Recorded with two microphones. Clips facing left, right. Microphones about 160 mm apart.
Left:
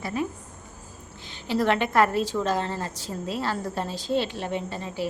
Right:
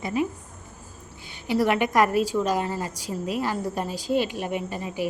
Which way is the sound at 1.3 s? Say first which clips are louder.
Right 1 dB; 10° right (ahead or behind).